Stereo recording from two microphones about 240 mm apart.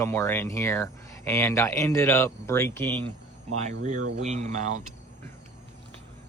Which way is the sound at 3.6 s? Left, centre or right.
Right.